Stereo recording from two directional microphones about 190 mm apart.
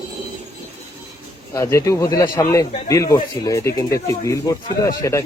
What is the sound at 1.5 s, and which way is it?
Speech, 15° left (ahead or behind).